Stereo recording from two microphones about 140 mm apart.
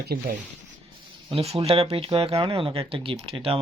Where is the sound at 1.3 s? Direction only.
45° right (ahead or behind).